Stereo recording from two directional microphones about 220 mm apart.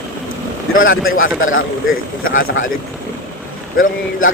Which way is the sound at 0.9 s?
65° left (ahead or behind).